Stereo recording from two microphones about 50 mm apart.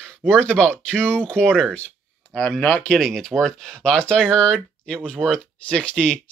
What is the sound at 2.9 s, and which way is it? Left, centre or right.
Speech, centre.